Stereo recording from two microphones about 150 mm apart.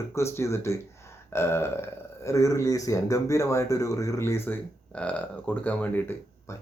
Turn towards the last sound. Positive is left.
turn(degrees=15)  # may be behind; listen again after turning